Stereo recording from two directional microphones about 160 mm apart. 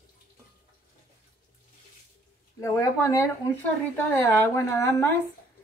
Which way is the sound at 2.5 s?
20° left (ahead or behind).